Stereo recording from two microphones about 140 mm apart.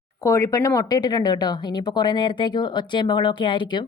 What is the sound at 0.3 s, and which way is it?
Speech, 20° left (ahead or behind).